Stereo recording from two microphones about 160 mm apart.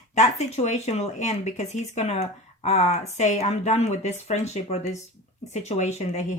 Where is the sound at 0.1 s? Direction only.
45° left (ahead or behind).